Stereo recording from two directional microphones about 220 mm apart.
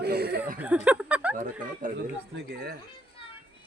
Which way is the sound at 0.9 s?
5° right (ahead or behind).